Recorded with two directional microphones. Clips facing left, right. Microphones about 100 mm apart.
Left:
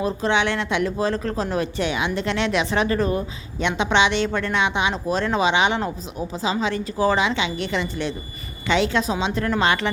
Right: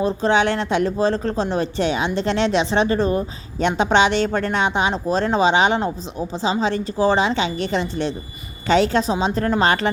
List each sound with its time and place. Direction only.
0.0 s speech: 35° right (ahead or behind)